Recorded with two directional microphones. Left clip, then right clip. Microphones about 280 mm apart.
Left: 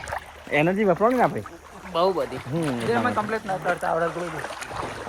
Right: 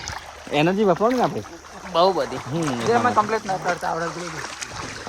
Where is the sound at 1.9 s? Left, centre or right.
Right.